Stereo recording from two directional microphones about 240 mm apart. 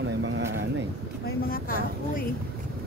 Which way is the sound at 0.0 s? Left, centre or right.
Right.